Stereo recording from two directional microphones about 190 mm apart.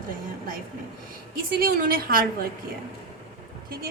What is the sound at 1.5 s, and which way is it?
Speech, 50° right (ahead or behind).